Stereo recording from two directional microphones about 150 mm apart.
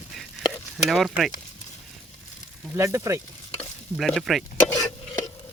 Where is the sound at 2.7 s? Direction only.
15° right (ahead or behind).